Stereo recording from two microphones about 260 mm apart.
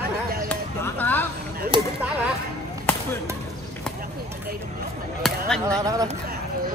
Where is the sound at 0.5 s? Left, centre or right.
Centre.